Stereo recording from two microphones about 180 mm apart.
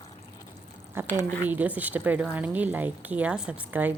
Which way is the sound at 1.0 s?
15° right (ahead or behind).